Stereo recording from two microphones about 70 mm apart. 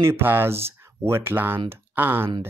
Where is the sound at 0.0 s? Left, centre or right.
Right.